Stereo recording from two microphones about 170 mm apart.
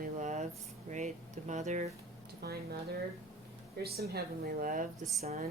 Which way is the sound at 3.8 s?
65° right (ahead or behind).